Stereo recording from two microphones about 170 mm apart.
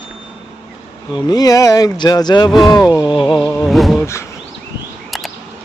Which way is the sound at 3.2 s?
5° left (ahead or behind).